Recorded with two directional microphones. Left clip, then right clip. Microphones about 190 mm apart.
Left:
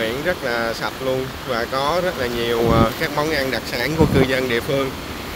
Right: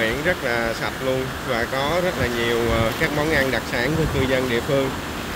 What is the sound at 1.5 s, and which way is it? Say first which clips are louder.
Speech: left 2 dB; 35° left (ahead or behind).